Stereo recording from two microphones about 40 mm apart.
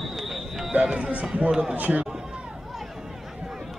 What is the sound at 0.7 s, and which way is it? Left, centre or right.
Speech, right.